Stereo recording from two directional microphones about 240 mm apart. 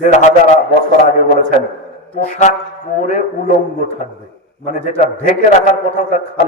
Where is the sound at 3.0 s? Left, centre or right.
Left.